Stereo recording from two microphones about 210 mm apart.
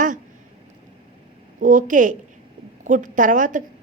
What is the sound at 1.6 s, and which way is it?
A woman's voice, 40° right (ahead or behind).